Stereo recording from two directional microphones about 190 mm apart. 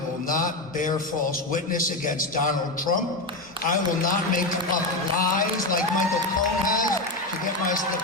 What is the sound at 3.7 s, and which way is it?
A man's voice, 45° left (ahead or behind).